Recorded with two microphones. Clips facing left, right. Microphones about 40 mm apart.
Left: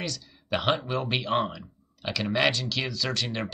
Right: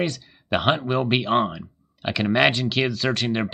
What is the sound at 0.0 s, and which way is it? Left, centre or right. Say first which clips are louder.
Speech: right 9 dB; right.